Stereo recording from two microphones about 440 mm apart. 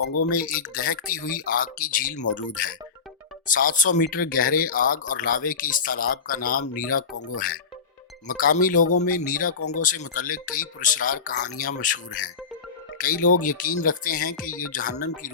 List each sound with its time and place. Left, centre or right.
0.0 s speech: left
0.3 s speech: centre
8.3 s speech: centre
13.0 s speech: centre